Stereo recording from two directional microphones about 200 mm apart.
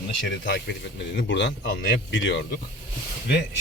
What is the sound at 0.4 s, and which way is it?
Speech, 55° left (ahead or behind).